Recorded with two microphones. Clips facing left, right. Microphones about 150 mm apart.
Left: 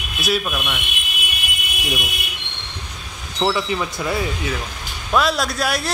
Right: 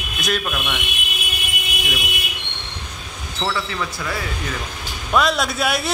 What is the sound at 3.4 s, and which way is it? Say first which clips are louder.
Speech: left 4 dB; 20° left (ahead or behind).